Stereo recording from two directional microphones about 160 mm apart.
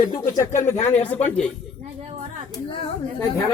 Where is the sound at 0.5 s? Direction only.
15° left (ahead or behind).